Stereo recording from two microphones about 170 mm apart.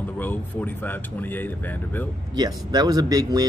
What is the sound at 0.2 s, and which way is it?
Speech, 10° left (ahead or behind).